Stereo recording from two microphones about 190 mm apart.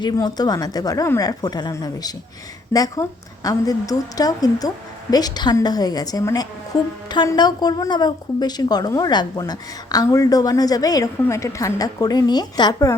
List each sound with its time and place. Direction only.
0.0 s a woman's voice: 20° left (ahead or behind)